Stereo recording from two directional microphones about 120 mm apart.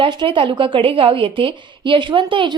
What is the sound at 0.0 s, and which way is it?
A woman's voice, 40° right (ahead or behind).